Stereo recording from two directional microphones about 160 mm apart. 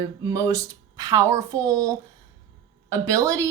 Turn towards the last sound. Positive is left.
turn(degrees=-20)  # may be behind; listen again after turning